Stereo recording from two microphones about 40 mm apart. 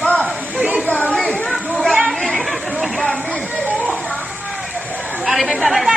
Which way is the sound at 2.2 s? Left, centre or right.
Centre.